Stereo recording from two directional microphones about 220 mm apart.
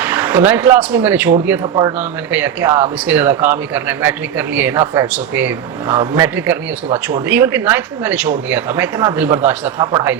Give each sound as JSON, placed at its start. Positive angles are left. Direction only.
{"t": 0.0, "sound": "speech", "side_deg": -5}
{"t": 1.6, "sound": "speech", "side_deg": -20}
{"t": 2.0, "sound": "speech", "side_deg": -10}